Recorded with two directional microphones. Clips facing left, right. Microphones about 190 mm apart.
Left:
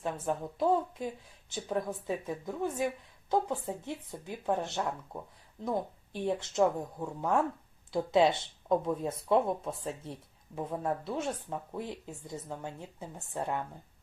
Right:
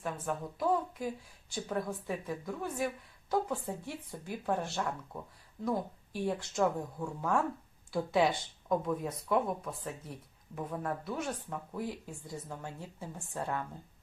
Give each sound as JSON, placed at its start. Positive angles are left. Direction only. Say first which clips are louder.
{"t": 0.0, "sound": "speech", "louder": "left 3 dB", "side_deg": 25}